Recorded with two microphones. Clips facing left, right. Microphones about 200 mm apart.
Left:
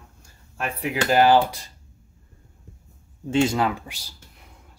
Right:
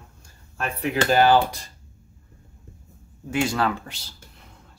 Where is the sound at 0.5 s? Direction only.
10° left (ahead or behind).